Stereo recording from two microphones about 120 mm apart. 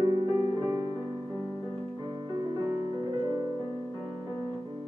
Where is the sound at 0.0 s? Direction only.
40° right (ahead or behind).